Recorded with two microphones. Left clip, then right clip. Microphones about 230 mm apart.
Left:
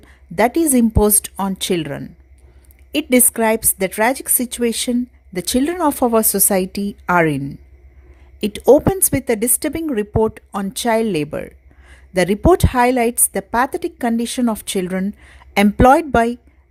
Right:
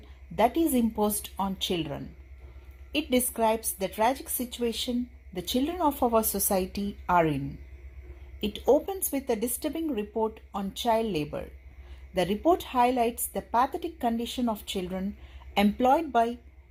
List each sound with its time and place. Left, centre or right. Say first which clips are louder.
0.3 s a woman's voice: left 9 dB; left
8.4 s a woman's voice: left 12 dB; left